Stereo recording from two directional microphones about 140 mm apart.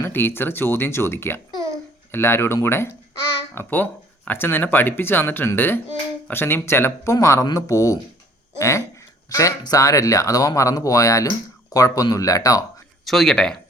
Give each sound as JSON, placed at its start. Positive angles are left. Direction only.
{"t": 0.0, "sound": "speech", "side_deg": 15}
{"t": 1.5, "sound": "babbling", "side_deg": -25}
{"t": 2.1, "sound": "speech", "side_deg": 15}
{"t": 13.1, "sound": "speech", "side_deg": 5}